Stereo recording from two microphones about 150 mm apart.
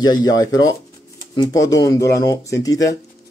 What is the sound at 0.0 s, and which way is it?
Speech, 25° left (ahead or behind).